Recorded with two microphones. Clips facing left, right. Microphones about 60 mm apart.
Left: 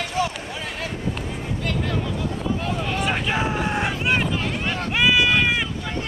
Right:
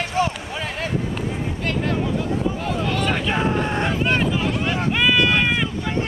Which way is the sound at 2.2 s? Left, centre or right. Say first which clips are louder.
Right 4 dB; right.